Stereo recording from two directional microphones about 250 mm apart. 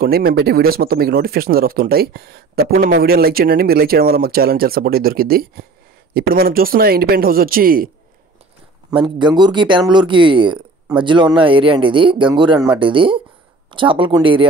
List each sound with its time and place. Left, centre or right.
0.0 s speech: right
9.2 s speech: centre